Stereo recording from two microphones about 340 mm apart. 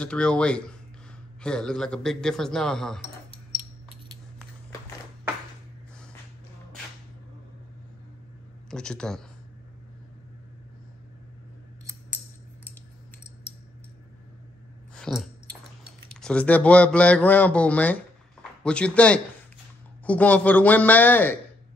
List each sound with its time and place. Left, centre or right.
0.0 s a man's voice: centre
8.6 s speech: centre
15.0 s chewing: centre
16.1 s a man's voice: centre